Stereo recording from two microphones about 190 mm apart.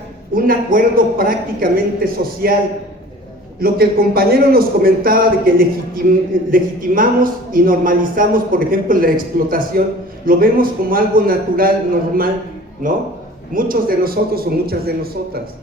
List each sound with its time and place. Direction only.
0.3 s speech: 45° right (ahead or behind)
3.6 s speech: 50° right (ahead or behind)
12.8 s speech: 45° right (ahead or behind)